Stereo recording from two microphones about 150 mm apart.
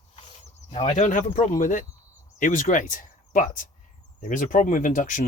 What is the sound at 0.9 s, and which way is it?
Speech, 55° left (ahead or behind).